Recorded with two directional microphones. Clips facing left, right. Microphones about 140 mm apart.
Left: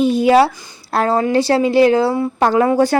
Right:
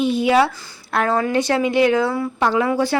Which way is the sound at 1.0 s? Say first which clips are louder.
Left 4 dB; 30° left (ahead or behind).